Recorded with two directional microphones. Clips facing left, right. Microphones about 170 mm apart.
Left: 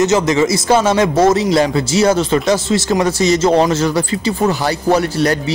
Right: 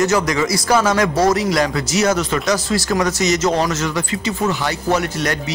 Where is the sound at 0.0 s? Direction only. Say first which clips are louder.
Left 4 dB; 20° left (ahead or behind).